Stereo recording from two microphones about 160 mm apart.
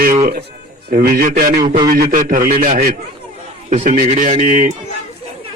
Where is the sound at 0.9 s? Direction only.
70° right (ahead or behind).